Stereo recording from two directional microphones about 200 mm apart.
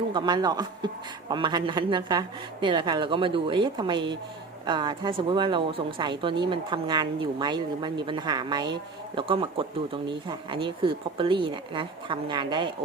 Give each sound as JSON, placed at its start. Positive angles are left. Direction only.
{"t": 0.1, "sound": "speech", "side_deg": -20}